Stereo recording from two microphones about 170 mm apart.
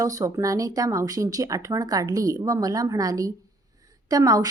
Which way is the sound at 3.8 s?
20° right (ahead or behind).